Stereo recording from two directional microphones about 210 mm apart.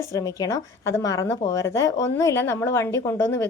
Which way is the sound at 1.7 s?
15° left (ahead or behind).